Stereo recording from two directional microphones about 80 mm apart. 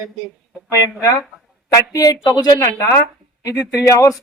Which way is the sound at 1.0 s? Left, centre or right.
Left.